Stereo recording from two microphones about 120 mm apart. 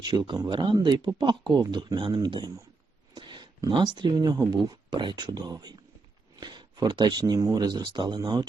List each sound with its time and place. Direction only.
0.0 s speech: 35° right (ahead or behind)